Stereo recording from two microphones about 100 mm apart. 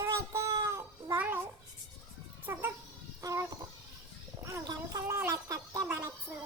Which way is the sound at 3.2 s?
35° right (ahead or behind).